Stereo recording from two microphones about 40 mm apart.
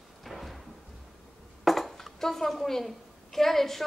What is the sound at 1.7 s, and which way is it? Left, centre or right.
A woman's voice, centre.